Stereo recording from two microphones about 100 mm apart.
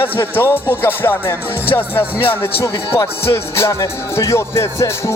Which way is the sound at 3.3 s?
30° left (ahead or behind).